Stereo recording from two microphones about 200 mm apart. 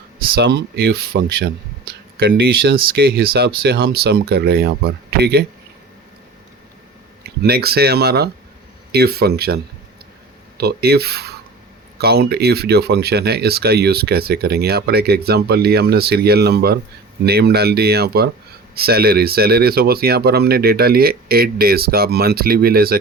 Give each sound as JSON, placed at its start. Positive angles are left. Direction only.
{"t": 0.3, "sound": "speech", "side_deg": -60}
{"t": 7.3, "sound": "speech", "side_deg": -50}
{"t": 10.6, "sound": "speech", "side_deg": -50}